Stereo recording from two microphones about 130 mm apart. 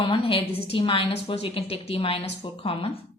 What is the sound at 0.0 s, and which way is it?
A woman's voice, 45° left (ahead or behind).